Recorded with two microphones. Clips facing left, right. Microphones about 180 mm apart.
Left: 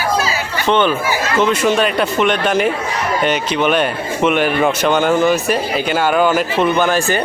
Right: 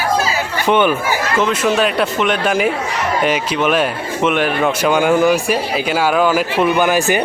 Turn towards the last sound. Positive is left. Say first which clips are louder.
# right 1 dB
turn(degrees=-15)  # may be behind; listen again after turning